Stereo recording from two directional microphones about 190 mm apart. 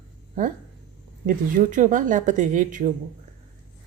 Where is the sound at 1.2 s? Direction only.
45° right (ahead or behind).